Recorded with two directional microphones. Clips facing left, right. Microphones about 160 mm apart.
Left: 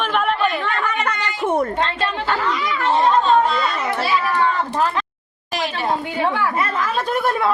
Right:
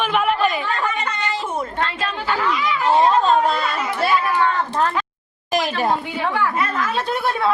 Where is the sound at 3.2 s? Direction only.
45° right (ahead or behind).